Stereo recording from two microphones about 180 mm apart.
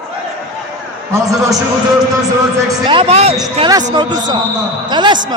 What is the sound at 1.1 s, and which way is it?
Speech, 20° right (ahead or behind).